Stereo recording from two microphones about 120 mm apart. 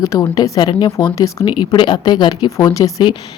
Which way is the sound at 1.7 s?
40° left (ahead or behind).